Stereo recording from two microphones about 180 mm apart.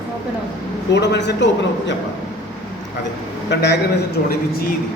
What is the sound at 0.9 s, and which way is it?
A man's voice, 70° left (ahead or behind).